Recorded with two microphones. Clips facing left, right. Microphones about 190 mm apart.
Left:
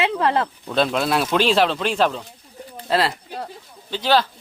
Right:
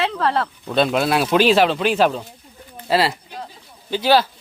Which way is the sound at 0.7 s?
Centre (ahead or behind).